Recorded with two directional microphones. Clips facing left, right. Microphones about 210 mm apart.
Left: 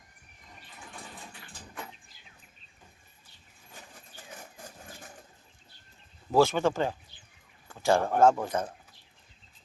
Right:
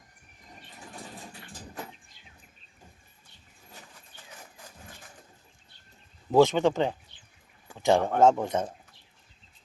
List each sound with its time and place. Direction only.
0.8 s vehicle: 40° right (ahead or behind)
6.3 s speech: 20° right (ahead or behind)
7.7 s a sound: 20° right (ahead or behind)
8.2 s speech: 20° right (ahead or behind)